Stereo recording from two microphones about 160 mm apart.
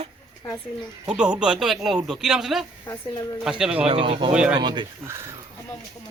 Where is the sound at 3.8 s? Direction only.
40° right (ahead or behind).